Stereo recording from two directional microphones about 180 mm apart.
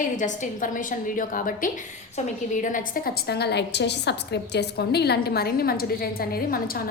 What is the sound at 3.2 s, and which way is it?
A woman's voice, 65° left (ahead or behind).